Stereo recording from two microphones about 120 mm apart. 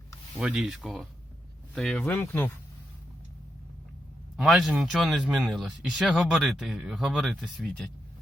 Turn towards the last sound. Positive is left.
turn(degrees=0)  # may be behind; listen again after turning